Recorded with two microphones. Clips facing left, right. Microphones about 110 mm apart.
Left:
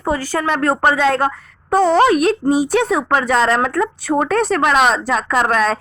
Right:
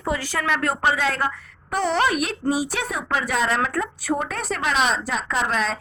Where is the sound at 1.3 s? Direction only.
25° left (ahead or behind).